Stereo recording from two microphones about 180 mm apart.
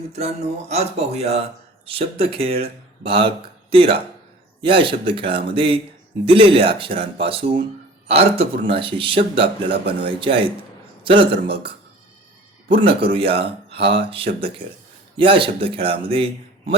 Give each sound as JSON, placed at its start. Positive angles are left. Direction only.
{"t": 0.7, "sound": "speech", "side_deg": -35}
{"t": 12.7, "sound": "speech", "side_deg": -30}